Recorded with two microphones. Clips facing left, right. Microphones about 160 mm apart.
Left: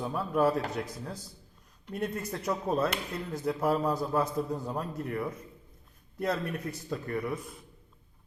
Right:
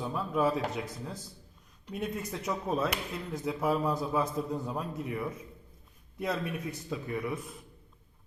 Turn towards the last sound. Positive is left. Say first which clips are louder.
# left 1 dB
turn(degrees=0)  # may be behind; listen again after turning